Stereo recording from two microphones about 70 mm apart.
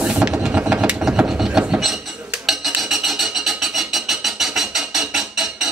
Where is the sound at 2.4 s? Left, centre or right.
Centre.